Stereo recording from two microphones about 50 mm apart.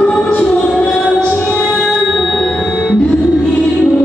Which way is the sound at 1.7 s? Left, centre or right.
Centre.